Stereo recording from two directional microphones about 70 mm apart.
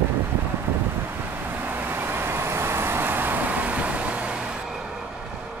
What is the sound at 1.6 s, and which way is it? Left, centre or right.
Vehicle, right.